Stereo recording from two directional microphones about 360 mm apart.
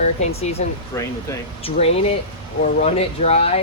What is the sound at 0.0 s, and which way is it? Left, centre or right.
Speech, centre.